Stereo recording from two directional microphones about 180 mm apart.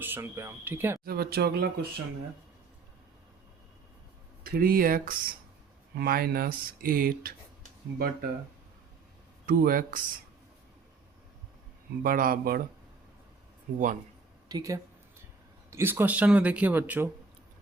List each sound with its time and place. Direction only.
0.0 s speech: 15° right (ahead or behind)
1.0 s speech: 60° right (ahead or behind)
4.4 s speech: 55° right (ahead or behind)
9.5 s speech: 50° right (ahead or behind)
12.0 s speech: 50° right (ahead or behind)
13.7 s speech: 45° right (ahead or behind)
14.4 s speech: 20° right (ahead or behind)